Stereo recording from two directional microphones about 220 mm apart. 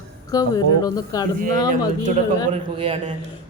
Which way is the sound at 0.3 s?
15° left (ahead or behind).